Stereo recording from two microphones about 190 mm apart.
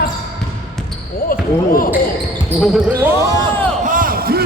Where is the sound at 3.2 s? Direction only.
20° right (ahead or behind).